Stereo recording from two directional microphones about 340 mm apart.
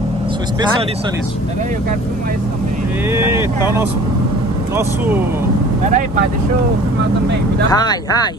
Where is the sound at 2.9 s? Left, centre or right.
Centre.